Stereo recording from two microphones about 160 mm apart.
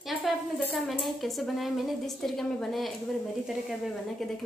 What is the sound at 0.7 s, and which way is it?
A woman's voice, centre (ahead or behind).